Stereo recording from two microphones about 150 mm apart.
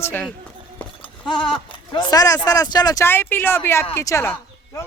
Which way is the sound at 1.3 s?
35° left (ahead or behind).